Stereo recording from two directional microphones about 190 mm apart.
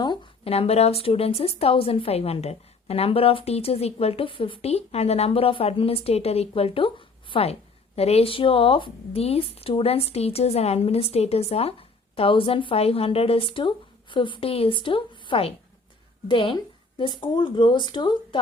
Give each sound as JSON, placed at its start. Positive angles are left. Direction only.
{"t": 0.0, "sound": "a woman's voice", "side_deg": 25}